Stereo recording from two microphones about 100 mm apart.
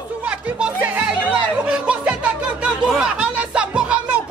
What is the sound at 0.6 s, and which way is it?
Music, 10° right (ahead or behind).